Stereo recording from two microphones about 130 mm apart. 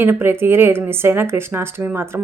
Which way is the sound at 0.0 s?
15° right (ahead or behind).